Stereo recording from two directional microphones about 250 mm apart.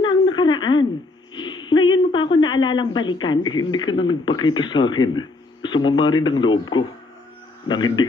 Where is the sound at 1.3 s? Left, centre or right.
Centre.